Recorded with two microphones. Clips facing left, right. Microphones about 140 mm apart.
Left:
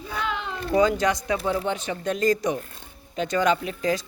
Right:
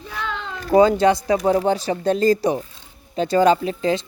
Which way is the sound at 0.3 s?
10° left (ahead or behind).